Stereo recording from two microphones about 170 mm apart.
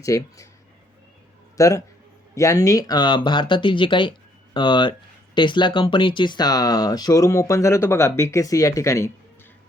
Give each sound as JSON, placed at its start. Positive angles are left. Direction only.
{"t": 0.0, "sound": "speech", "side_deg": 20}
{"t": 1.5, "sound": "speech", "side_deg": 20}